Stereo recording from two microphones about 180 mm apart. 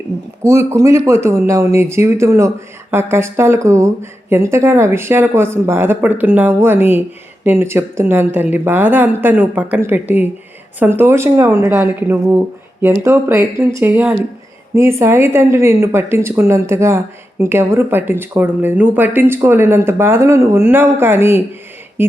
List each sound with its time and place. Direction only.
0.4 s speech: 15° right (ahead or behind)